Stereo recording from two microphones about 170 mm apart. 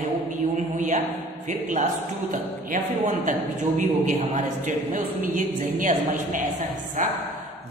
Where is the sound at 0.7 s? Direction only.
50° right (ahead or behind).